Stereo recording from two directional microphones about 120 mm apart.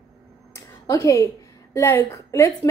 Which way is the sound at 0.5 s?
25° left (ahead or behind).